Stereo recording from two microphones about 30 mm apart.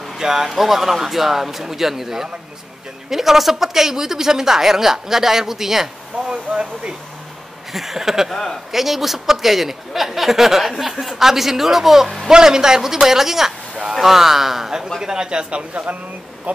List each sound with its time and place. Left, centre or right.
0.2 s speech: centre
6.1 s a sound: right
7.7 s speech: centre
12.3 s a man's voice: right
15.0 s a man's voice: right